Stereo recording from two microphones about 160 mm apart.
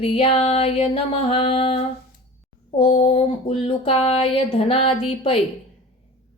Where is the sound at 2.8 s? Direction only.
35° left (ahead or behind).